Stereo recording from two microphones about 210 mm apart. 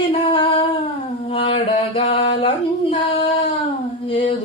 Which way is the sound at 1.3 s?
25° left (ahead or behind).